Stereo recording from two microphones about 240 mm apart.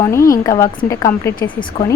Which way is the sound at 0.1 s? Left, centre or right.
Centre.